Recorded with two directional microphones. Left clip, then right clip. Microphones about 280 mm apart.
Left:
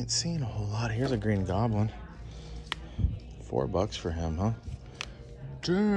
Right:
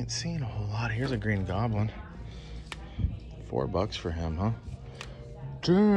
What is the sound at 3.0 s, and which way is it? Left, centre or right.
Speech, centre.